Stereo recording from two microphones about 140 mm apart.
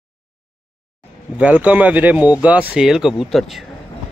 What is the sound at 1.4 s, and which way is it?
A man's voice, 10° right (ahead or behind).